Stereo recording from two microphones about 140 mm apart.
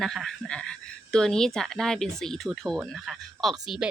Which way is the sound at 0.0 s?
Centre (ahead or behind).